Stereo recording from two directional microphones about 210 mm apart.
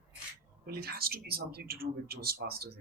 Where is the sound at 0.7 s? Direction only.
45° right (ahead or behind).